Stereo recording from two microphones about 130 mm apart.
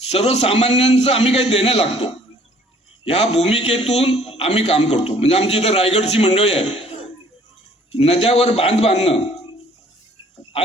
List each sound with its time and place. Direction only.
0.1 s a man's voice: 55° left (ahead or behind)
7.9 s a man's voice: 50° left (ahead or behind)